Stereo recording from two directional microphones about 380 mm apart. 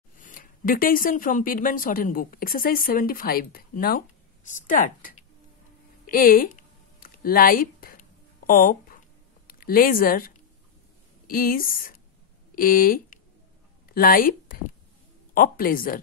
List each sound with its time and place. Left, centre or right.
0.2 s speech: left
6.0 s a sound: left
9.5 s speech: left